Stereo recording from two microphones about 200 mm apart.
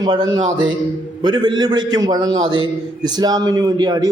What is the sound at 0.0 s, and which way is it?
A man's voice, 20° right (ahead or behind).